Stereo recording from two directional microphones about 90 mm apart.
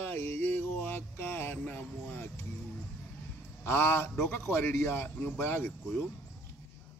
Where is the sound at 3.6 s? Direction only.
25° left (ahead or behind).